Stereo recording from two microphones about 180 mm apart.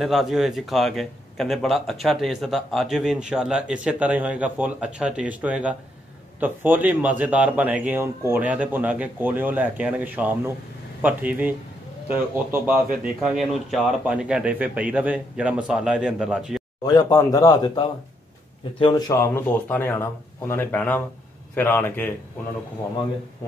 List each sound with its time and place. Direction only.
0.0 s a man's voice: centre (ahead or behind)
16.8 s speech: 20° left (ahead or behind)